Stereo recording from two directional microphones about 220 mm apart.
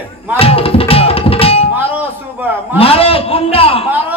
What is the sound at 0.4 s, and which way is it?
Music, 25° left (ahead or behind).